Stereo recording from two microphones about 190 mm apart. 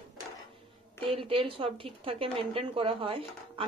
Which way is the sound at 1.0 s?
30° right (ahead or behind).